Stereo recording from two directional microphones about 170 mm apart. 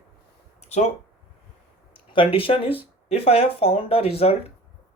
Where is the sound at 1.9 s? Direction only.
30° left (ahead or behind).